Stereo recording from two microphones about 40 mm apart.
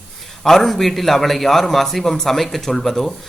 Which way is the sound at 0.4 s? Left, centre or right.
Centre.